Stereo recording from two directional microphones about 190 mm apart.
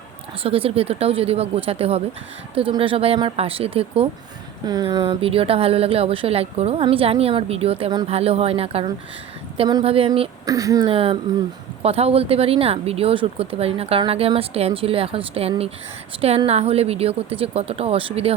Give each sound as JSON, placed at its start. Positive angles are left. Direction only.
{"t": 0.4, "sound": "a woman's voice", "side_deg": -30}